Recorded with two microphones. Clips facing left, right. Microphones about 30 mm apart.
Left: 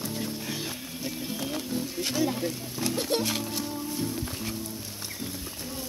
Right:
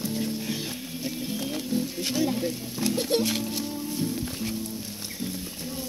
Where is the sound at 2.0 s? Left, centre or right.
Right.